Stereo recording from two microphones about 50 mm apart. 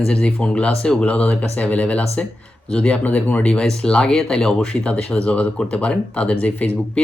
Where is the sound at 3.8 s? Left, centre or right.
Centre.